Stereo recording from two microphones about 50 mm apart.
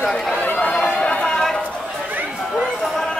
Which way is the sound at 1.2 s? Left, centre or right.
Centre.